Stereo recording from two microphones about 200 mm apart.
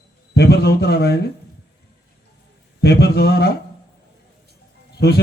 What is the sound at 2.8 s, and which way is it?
Speech, 55° left (ahead or behind).